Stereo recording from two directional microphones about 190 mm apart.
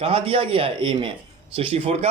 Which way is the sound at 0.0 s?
30° right (ahead or behind).